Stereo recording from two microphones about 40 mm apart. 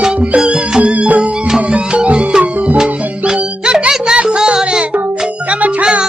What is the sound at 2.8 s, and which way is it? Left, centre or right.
Music, centre.